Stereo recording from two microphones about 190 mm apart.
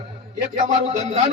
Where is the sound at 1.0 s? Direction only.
35° right (ahead or behind).